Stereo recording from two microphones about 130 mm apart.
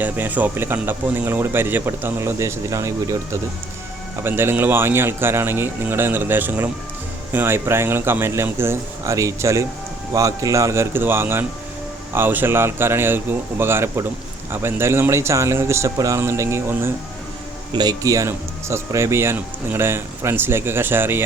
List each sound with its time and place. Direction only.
0.0 s speech: 15° right (ahead or behind)
4.2 s speech: 15° right (ahead or behind)
17.7 s speech: 35° right (ahead or behind); by 21.2 s 15° right (ahead or behind)